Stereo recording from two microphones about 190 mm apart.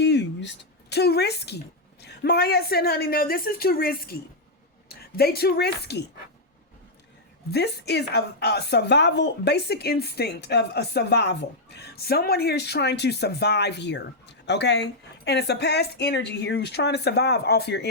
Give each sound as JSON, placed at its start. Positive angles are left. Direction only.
{"t": 0.0, "sound": "a woman's voice", "side_deg": 65}
{"t": 7.5, "sound": "a woman's voice", "side_deg": 60}